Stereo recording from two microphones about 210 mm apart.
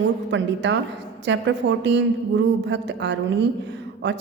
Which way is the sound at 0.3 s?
60° right (ahead or behind).